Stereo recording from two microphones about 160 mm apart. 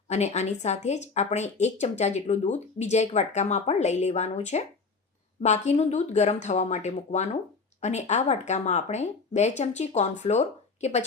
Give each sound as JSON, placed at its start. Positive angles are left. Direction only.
{"t": 0.1, "sound": "speech", "side_deg": 45}